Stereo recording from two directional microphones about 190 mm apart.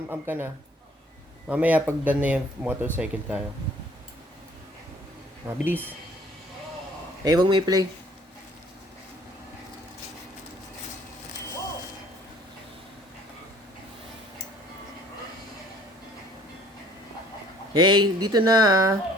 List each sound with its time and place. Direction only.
0.1 s speech: 10° right (ahead or behind)
5.5 s speech: 10° right (ahead or behind)
7.3 s speech: 20° right (ahead or behind)
17.7 s speech: 25° right (ahead or behind)